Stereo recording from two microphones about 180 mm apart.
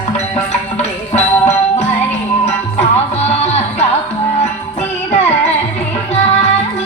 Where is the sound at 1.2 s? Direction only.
40° left (ahead or behind).